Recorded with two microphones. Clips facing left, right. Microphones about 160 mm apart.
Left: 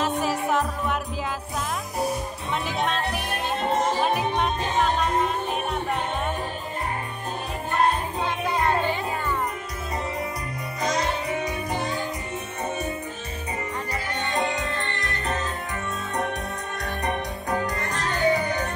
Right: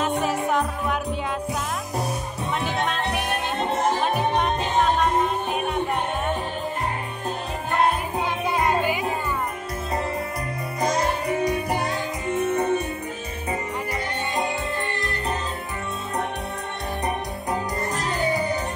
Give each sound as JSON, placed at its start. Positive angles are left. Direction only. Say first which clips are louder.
{"t": 0.0, "sound": "music", "louder": "right 1 dB", "side_deg": 0}
{"t": 2.6, "sound": "music", "louder": "even", "side_deg": 0}
{"t": 4.0, "sound": "music", "louder": "right 1 dB", "side_deg": 0}
{"t": 8.2, "sound": "music", "louder": "right 1 dB", "side_deg": -15}
{"t": 11.5, "sound": "music", "louder": "right 3 dB", "side_deg": -65}
{"t": 17.0, "sound": "music", "louder": "even", "side_deg": -10}